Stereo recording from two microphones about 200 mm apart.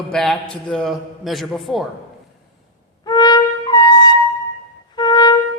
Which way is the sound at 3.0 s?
20° left (ahead or behind).